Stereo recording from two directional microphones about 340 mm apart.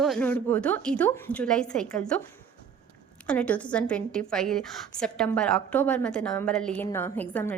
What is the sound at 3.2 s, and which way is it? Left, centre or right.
A woman's voice, centre.